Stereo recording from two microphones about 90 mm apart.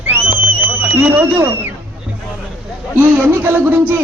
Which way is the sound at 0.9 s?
25° right (ahead or behind).